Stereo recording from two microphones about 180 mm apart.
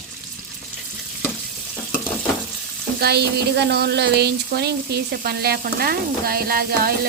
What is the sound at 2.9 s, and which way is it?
Speech, 65° right (ahead or behind).